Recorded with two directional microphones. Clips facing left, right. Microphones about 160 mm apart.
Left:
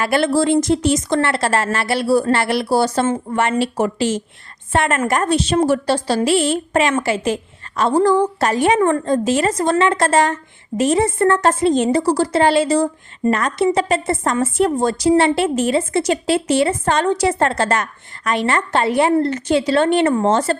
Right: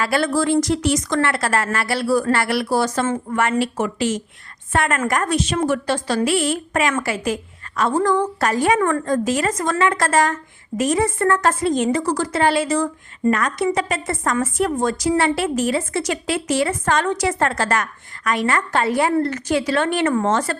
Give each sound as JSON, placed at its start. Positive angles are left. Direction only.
{"t": 0.0, "sound": "a woman's voice", "side_deg": 25}